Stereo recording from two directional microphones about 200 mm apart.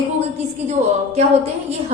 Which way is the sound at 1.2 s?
30° right (ahead or behind).